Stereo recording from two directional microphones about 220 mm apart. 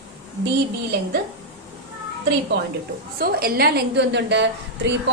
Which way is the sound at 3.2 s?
45° right (ahead or behind).